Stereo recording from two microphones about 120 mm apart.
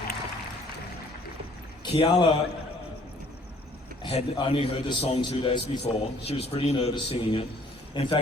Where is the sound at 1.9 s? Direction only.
40° left (ahead or behind).